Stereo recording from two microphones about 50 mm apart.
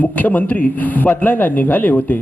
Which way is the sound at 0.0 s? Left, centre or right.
Left.